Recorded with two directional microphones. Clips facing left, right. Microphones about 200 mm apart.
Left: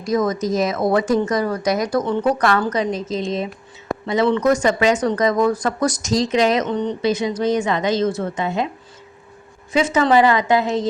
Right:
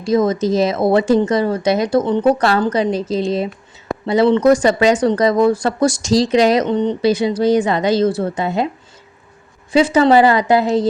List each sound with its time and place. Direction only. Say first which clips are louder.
0.0 s speech: right 4 dB; 30° right (ahead or behind)
9.7 s speech: right 4 dB; 35° right (ahead or behind)